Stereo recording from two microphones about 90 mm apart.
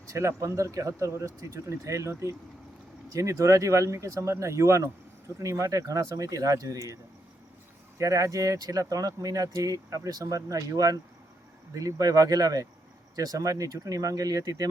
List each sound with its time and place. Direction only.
0.1 s speech: 35° right (ahead or behind)